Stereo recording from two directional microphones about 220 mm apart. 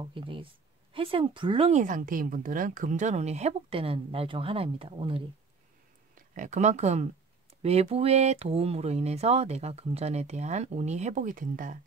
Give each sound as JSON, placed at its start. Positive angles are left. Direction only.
{"t": 0.0, "sound": "speech", "side_deg": -25}
{"t": 6.1, "sound": "speech", "side_deg": -35}